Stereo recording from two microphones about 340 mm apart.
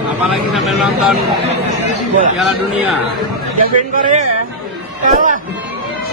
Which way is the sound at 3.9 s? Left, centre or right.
Right.